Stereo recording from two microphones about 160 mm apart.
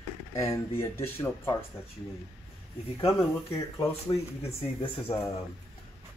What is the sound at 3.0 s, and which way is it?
Speech, 15° left (ahead or behind).